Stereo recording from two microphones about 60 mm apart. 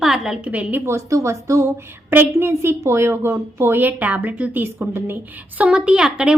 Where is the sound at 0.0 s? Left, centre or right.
Centre.